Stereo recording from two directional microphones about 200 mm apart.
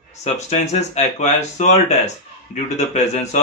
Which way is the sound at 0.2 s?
35° left (ahead or behind).